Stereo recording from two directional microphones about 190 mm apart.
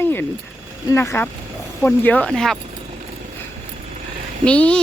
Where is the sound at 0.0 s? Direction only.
10° left (ahead or behind).